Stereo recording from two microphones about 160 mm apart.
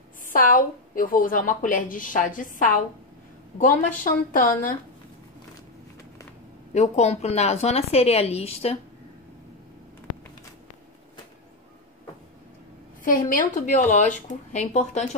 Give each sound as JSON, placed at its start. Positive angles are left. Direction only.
{"t": 0.3, "sound": "a woman's voice", "side_deg": 60}
{"t": 6.7, "sound": "speech", "side_deg": 45}
{"t": 13.0, "sound": "speech", "side_deg": 55}